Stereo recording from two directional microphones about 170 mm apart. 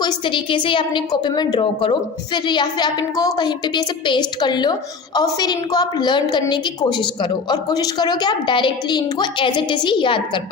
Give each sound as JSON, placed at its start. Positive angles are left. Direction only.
{"t": 0.0, "sound": "a woman's voice", "side_deg": 25}